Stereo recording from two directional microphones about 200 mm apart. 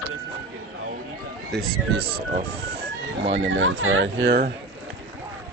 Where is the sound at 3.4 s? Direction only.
75° right (ahead or behind).